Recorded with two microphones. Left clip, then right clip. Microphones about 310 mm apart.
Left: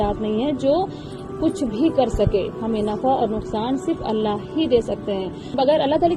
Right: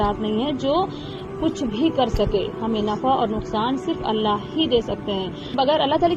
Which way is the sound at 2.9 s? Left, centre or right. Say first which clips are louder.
Even; centre.